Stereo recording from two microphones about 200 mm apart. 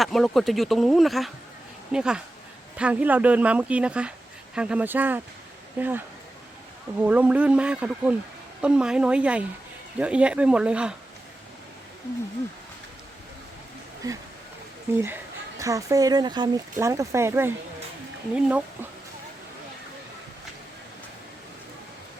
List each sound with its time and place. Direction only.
0.0 s speech: centre (ahead or behind)
7.0 s speech: 5° right (ahead or behind)
14.0 s speech: 15° right (ahead or behind)